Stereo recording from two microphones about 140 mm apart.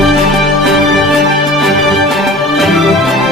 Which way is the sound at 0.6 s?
Centre (ahead or behind).